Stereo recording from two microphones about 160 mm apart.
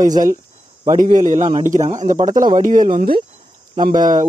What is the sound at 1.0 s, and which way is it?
A man's voice, 50° right (ahead or behind).